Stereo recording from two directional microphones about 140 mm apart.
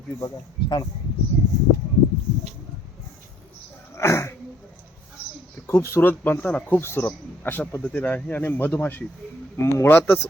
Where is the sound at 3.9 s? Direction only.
20° left (ahead or behind).